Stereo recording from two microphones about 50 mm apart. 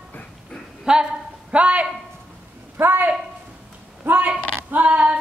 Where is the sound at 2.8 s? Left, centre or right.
Right.